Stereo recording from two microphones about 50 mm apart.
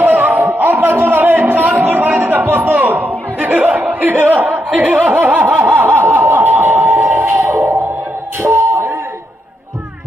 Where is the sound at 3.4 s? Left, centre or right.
Right.